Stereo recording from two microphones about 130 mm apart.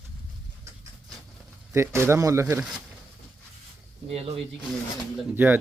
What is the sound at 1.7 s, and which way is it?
Speech, 20° right (ahead or behind).